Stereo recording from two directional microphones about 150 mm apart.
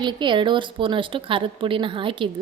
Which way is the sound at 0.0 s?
30° right (ahead or behind).